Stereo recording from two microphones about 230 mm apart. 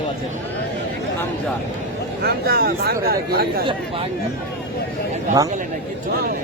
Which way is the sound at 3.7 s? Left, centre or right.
Right.